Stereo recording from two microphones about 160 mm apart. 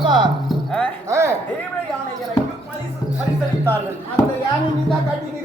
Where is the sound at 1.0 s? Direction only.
20° right (ahead or behind).